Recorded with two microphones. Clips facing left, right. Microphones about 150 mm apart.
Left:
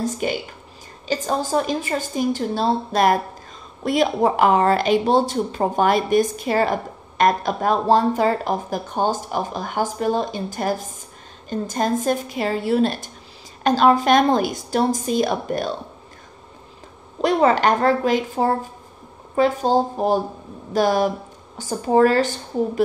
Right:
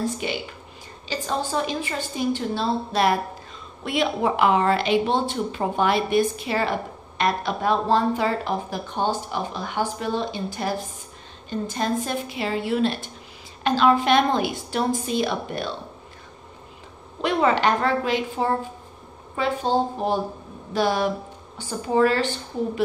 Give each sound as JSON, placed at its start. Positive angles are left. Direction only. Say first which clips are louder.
{"t": 0.0, "sound": "speech", "louder": "left 3 dB", "side_deg": 45}
{"t": 17.2, "sound": "speech", "louder": "left 4 dB", "side_deg": 40}